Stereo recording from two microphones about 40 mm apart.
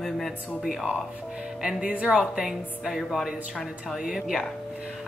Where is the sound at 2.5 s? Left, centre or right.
Centre.